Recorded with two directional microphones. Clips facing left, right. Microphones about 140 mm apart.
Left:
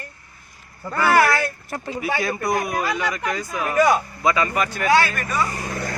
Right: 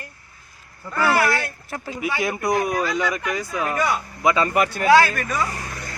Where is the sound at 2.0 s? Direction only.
15° right (ahead or behind).